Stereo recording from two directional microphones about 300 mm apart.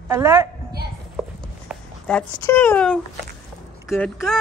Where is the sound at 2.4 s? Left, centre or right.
Centre.